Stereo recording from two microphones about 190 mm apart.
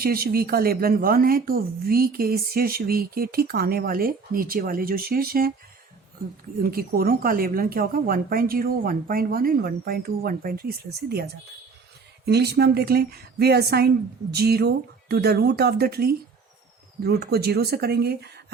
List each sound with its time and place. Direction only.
0.0 s speech: 50° right (ahead or behind)
6.6 s speech: 50° right (ahead or behind)